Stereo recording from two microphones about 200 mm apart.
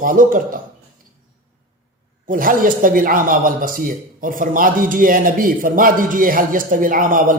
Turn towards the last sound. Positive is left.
turn(degrees=-45)  # may be behind; listen again after turning